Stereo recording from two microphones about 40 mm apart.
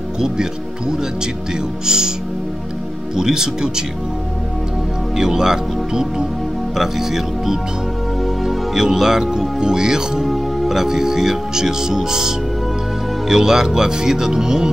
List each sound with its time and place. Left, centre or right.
0.2 s speech: centre
3.2 s speech: centre
5.1 s speech: centre
8.7 s speech: centre
10.2 s speech: centre